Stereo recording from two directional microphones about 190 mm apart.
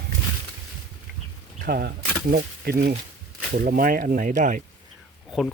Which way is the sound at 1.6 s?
55° right (ahead or behind).